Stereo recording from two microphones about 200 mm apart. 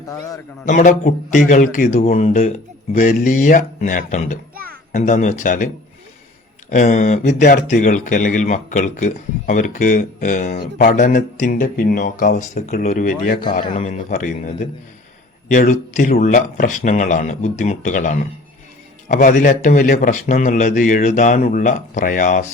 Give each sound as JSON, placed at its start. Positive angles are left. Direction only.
{"t": 0.6, "sound": "speech", "side_deg": 40}
{"t": 4.5, "sound": "music", "side_deg": -45}
{"t": 4.9, "sound": "speech", "side_deg": 40}